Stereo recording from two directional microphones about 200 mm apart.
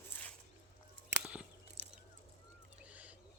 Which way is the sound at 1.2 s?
5° right (ahead or behind).